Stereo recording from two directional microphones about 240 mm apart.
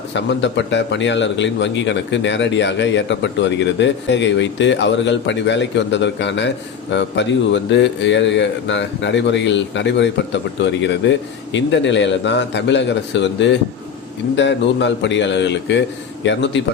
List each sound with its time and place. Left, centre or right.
0.1 s speech: left